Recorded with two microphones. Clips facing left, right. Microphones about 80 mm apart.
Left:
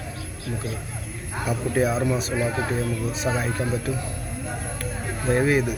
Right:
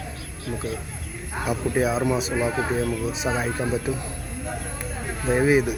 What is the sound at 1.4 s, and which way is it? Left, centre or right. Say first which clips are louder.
Speech: even; centre.